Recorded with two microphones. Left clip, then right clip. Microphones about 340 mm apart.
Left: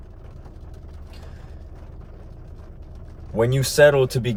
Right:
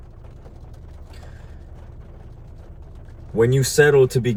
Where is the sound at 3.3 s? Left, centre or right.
Centre.